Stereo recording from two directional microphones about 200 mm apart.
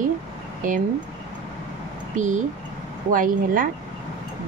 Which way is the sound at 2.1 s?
40° right (ahead or behind).